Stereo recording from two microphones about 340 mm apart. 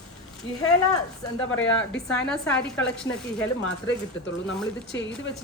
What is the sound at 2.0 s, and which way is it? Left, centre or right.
Speech, centre.